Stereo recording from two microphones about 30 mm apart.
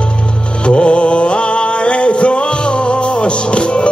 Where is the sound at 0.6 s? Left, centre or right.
Left.